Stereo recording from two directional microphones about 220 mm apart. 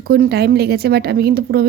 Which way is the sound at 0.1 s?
45° right (ahead or behind).